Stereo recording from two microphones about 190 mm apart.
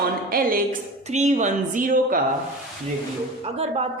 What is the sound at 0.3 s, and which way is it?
Speech, 50° right (ahead or behind).